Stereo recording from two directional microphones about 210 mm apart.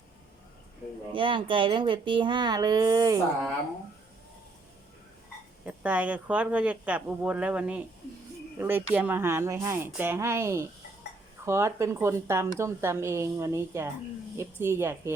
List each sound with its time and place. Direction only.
1.1 s speech: 25° right (ahead or behind)
5.6 s a woman's voice: 5° right (ahead or behind)